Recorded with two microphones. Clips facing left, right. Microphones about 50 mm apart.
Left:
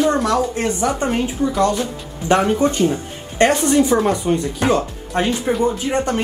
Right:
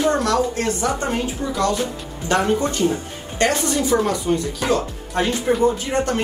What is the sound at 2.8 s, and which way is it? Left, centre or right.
A woman's voice, left.